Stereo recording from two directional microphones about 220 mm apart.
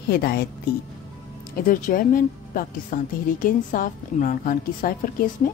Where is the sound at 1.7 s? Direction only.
35° left (ahead or behind).